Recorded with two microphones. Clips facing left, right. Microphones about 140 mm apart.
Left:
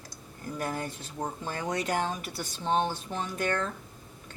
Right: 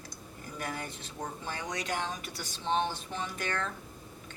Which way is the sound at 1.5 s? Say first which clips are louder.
Left 5 dB; 45° left (ahead or behind).